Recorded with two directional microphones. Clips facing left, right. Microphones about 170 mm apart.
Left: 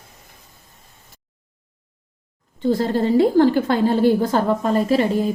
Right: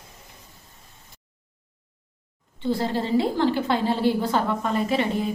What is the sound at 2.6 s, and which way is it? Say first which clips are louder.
A woman's voice: left 6 dB; 45° left (ahead or behind).